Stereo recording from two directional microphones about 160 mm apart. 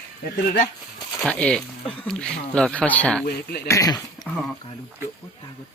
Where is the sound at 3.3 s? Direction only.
80° left.